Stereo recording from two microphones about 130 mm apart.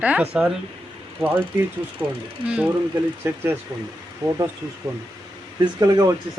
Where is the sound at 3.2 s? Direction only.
15° right (ahead or behind).